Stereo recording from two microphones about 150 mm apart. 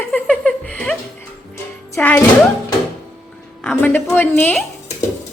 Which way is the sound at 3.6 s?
15° left (ahead or behind).